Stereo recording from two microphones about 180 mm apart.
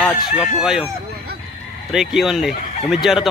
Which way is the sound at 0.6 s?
5° right (ahead or behind).